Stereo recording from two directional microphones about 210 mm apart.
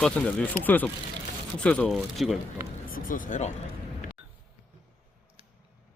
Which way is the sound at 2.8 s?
40° left (ahead or behind).